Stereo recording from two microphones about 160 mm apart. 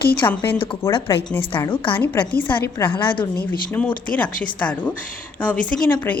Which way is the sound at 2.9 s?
30° left (ahead or behind).